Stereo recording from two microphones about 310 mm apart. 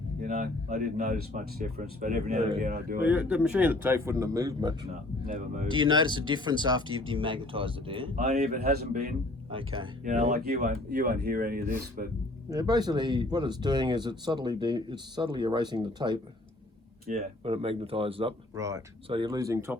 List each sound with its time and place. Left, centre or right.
0.2 s speech: right
3.0 s speech: centre
5.2 s speech: right
9.5 s speech: centre
12.5 s speech: centre